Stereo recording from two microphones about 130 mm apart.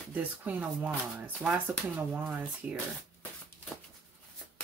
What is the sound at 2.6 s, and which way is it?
Speech, 10° right (ahead or behind).